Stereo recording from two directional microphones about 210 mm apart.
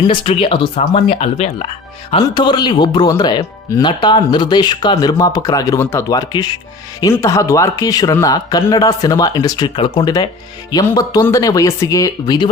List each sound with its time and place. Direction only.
0.0 s speech: 25° left (ahead or behind)